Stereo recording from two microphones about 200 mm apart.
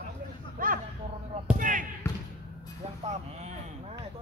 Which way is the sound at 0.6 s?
45° right (ahead or behind).